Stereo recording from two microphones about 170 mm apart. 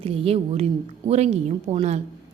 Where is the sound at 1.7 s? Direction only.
40° right (ahead or behind).